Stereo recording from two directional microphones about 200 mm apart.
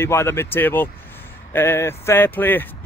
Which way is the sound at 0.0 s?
10° left (ahead or behind).